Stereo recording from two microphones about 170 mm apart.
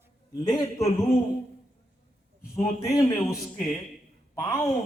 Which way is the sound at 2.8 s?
20° left (ahead or behind).